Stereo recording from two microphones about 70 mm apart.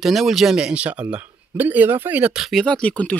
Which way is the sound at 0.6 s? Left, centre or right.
Centre.